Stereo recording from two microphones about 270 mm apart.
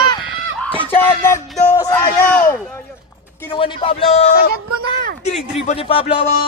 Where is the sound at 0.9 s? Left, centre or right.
Centre.